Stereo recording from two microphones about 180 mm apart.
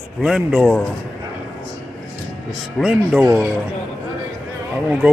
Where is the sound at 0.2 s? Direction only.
5° right (ahead or behind).